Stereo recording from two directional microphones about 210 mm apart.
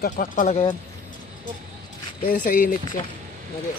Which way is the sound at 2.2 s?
40° left (ahead or behind).